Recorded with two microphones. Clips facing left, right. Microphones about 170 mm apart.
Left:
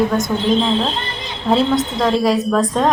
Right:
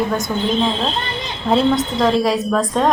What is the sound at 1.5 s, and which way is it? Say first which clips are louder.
A woman's voice: even; centre (ahead or behind).